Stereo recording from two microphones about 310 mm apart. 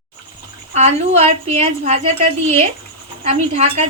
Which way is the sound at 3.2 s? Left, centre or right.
Right.